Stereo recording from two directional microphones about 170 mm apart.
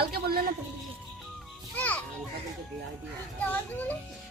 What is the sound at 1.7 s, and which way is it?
Children playing, 10° left (ahead or behind).